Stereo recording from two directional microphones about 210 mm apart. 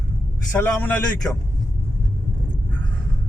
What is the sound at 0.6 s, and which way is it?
Speech, 5° left (ahead or behind).